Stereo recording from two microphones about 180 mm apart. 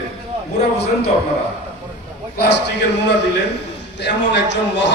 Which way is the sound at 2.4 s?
70° left (ahead or behind).